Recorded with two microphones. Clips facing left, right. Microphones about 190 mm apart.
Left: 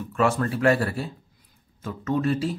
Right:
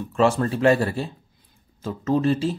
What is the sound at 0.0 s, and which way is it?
Speech, 25° right (ahead or behind).